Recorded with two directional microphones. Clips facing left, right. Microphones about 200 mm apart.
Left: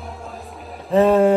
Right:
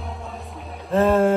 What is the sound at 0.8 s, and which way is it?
Speech, centre (ahead or behind).